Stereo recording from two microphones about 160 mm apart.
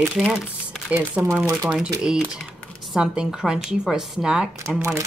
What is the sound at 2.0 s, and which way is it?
Speech, 5° right (ahead or behind).